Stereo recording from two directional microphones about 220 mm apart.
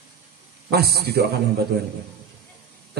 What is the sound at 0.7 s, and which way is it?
Speech, 45° right (ahead or behind).